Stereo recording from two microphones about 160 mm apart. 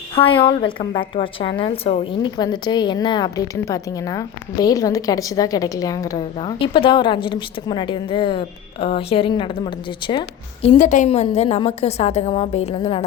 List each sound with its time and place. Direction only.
0.2 s a woman's voice: 35° left (ahead or behind)
2.4 s a woman's voice: 25° left (ahead or behind)
10.8 s a woman's voice: 55° left (ahead or behind)
11.1 s a woman's voice: 40° left (ahead or behind)